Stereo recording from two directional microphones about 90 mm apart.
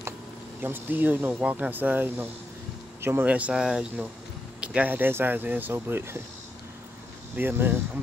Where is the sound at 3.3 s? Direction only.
15° right (ahead or behind).